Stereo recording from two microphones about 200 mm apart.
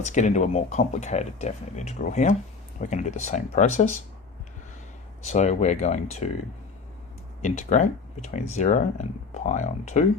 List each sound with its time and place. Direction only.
0.0 s speech: 35° left (ahead or behind)
5.3 s speech: 35° left (ahead or behind)
7.4 s speech: 35° left (ahead or behind)